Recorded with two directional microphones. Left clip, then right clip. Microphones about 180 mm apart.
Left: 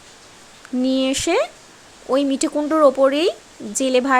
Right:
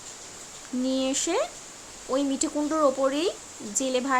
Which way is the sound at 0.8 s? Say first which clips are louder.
Left 7 dB; 30° left (ahead or behind).